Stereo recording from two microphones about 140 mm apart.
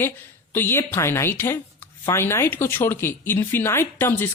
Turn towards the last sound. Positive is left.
turn(degrees=15)  # may be behind; listen again after turning